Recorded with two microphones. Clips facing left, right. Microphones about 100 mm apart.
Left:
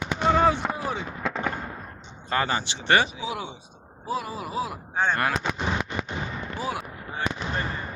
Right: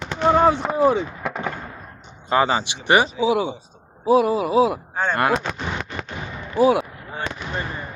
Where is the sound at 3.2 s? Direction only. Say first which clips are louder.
Right 12 dB; 75° right (ahead or behind).